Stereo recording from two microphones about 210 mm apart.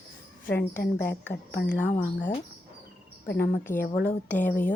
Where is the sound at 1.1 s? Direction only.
50° left (ahead or behind).